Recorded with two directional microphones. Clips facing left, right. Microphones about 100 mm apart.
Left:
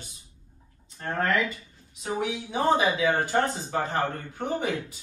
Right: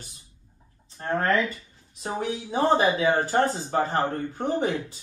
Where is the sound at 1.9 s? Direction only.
40° right (ahead or behind).